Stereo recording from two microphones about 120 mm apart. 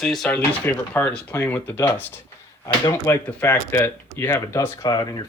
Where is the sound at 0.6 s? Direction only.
15° left (ahead or behind).